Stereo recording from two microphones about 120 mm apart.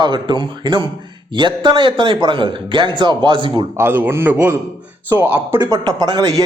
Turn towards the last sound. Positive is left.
turn(degrees=-30)  # may be behind; listen again after turning